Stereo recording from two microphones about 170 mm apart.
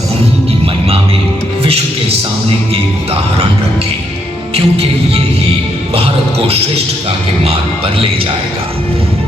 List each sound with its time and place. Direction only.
1.6 s music: 35° right (ahead or behind)
4.5 s music: 35° right (ahead or behind)